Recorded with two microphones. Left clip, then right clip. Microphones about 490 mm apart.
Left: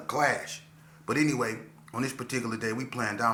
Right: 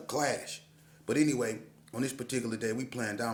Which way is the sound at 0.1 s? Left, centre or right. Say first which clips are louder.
Left 5 dB; right.